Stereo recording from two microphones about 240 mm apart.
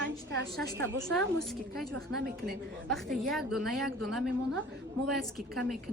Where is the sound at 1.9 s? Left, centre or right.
Right.